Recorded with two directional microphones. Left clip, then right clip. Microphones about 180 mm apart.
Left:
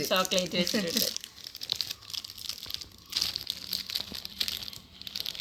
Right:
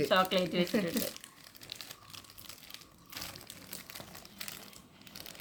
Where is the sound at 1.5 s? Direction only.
Centre (ahead or behind).